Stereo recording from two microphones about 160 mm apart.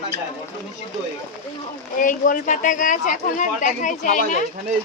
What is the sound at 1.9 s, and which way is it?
A woman's voice, 55° left (ahead or behind).